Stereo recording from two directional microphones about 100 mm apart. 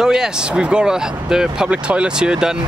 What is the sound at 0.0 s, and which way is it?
Speech, 5° right (ahead or behind).